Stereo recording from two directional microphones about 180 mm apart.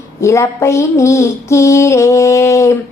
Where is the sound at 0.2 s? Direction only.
15° left (ahead or behind).